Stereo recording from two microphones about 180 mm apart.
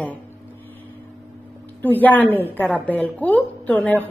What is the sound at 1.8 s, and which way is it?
A woman's voice, 10° left (ahead or behind).